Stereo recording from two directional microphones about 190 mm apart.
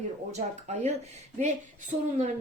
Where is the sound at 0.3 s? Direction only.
35° right (ahead or behind).